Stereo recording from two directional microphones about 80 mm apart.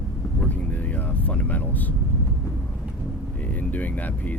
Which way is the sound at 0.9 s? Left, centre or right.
Centre.